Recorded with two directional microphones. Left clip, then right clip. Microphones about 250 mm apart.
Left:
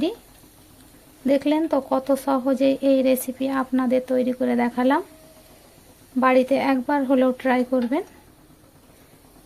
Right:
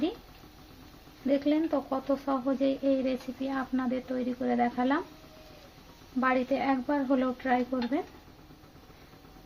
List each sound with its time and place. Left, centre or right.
1.3 s speech: left
6.1 s speech: left